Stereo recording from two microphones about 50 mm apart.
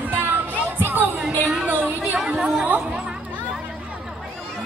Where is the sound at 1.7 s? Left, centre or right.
Right.